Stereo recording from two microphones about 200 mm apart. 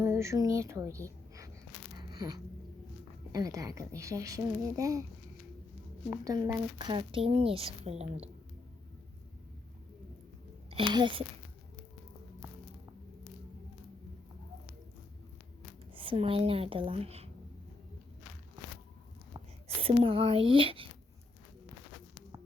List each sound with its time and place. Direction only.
0.0 s speech: 15° right (ahead or behind)
2.0 s a sound: 20° right (ahead or behind)
3.3 s a woman's voice: 15° right (ahead or behind)
6.1 s speech: 20° right (ahead or behind)
10.7 s a child's voice: 25° right (ahead or behind)
16.0 s speech: 25° right (ahead or behind)
19.3 s speech: 30° right (ahead or behind)